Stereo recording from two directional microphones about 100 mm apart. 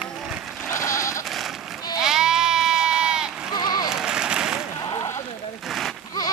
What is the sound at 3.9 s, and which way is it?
Applause, 10° right (ahead or behind).